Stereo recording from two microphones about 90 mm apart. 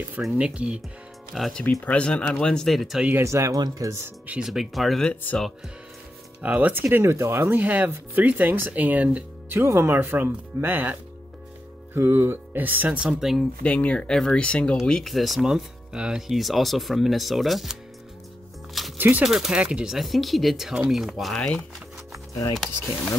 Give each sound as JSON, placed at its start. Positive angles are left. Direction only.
{"t": 0.2, "sound": "speech", "side_deg": -10}
{"t": 1.3, "sound": "speech", "side_deg": 5}
{"t": 1.9, "sound": "speech", "side_deg": 15}
{"t": 3.3, "sound": "speech", "side_deg": -35}
{"t": 4.3, "sound": "speech", "side_deg": -5}
{"t": 6.4, "sound": "speech", "side_deg": -15}
{"t": 9.6, "sound": "speech", "side_deg": -30}
{"t": 13.2, "sound": "speech", "side_deg": -5}
{"t": 13.6, "sound": "speech", "side_deg": 15}
{"t": 18.9, "sound": "speech", "side_deg": -20}
{"t": 19.2, "sound": "speech", "side_deg": -5}
{"t": 22.6, "sound": "speech", "side_deg": 0}